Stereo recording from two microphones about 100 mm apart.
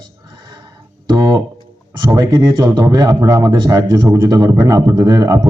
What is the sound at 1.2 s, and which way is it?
Speech, 35° right (ahead or behind).